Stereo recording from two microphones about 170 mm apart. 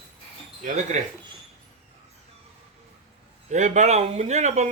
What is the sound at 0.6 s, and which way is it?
Speech, 45° right (ahead or behind).